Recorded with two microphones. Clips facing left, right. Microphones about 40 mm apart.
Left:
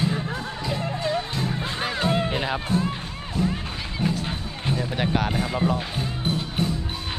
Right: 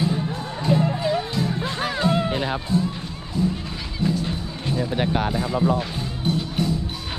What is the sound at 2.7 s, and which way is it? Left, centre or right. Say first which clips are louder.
Music: right 1 dB; left.